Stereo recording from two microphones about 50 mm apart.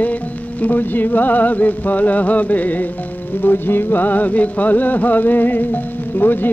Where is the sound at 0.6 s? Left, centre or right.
Left.